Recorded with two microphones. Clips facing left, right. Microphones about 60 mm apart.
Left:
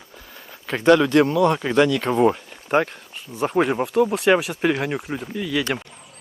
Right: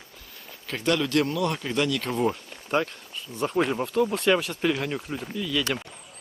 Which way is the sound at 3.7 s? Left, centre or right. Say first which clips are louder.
Left 5 dB; left.